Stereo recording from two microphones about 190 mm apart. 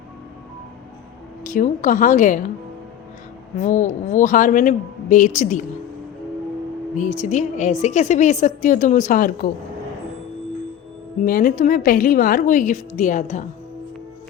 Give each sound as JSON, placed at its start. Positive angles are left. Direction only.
{"t": 1.5, "sound": "a woman's voice", "side_deg": 45}
{"t": 3.6, "sound": "a woman's voice", "side_deg": 40}
{"t": 6.9, "sound": "a woman's voice", "side_deg": 40}
{"t": 11.2, "sound": "a woman's voice", "side_deg": 45}